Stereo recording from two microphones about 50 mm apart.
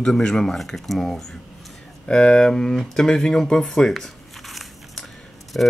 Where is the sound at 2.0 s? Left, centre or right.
Centre.